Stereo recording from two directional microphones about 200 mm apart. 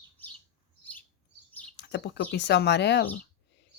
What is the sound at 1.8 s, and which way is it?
Speech, 60° left (ahead or behind).